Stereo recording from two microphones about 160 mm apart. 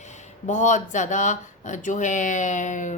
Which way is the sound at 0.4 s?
50° left (ahead or behind).